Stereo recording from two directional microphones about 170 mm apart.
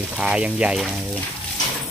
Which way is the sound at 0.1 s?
5° right (ahead or behind).